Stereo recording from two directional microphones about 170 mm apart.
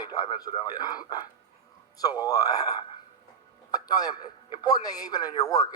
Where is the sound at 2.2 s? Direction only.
20° left (ahead or behind).